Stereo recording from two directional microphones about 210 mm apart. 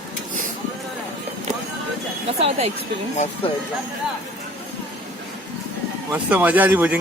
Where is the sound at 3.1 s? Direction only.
30° left (ahead or behind).